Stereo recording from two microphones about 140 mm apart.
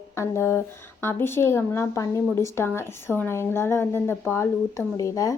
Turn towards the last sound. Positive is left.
turn(degrees=25)  # may be behind; listen again after turning